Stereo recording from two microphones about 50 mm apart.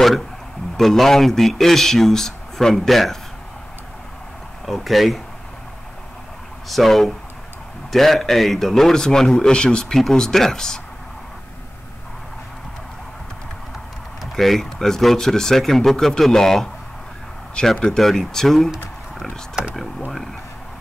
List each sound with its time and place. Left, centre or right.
0.7 s speech: centre
4.6 s speech: centre
6.7 s speech: centre
14.2 s speech: centre
17.9 s speech: centre